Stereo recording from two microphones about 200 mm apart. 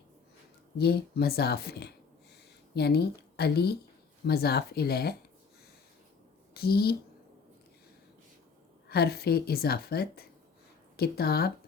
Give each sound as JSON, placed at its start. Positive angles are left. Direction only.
{"t": 0.8, "sound": "a woman's voice", "side_deg": 55}
{"t": 6.5, "sound": "a woman's voice", "side_deg": 50}
{"t": 8.9, "sound": "a woman's voice", "side_deg": 50}